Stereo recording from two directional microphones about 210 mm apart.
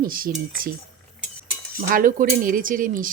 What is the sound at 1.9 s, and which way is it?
A woman's voice, 40° right (ahead or behind).